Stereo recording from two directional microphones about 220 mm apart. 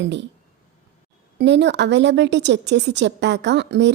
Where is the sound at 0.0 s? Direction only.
55° right (ahead or behind).